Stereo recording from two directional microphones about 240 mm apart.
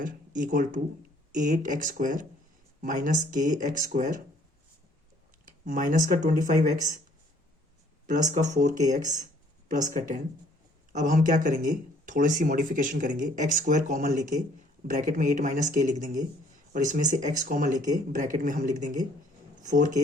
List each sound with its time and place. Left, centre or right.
0.0 s speech: right
5.5 s speech: right
8.0 s speech: right